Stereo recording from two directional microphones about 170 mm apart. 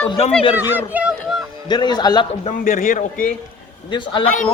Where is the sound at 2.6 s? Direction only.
50° left (ahead or behind).